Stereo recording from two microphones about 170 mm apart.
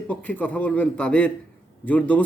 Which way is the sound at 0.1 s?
10° left (ahead or behind).